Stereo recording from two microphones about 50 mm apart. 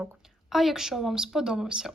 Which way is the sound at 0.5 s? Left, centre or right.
Centre.